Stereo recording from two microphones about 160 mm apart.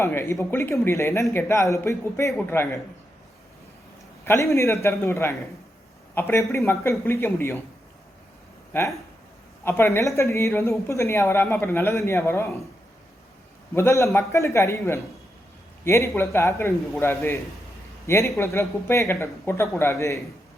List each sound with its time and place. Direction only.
0.0 s speech: 15° left (ahead or behind)
4.3 s speech: 20° left (ahead or behind)
9.6 s speech: 15° left (ahead or behind)
13.7 s speech: 15° left (ahead or behind)